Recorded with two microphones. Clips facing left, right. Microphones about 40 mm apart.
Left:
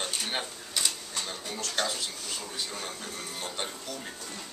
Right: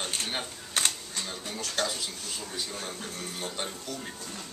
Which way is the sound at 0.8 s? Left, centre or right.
Right.